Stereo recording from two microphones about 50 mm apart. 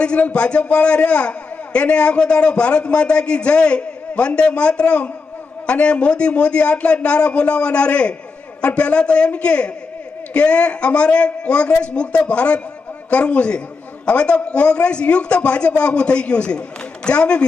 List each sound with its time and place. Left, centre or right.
0.0 s a man's voice: left